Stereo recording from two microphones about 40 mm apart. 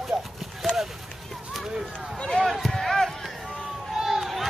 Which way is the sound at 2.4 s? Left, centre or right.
Centre.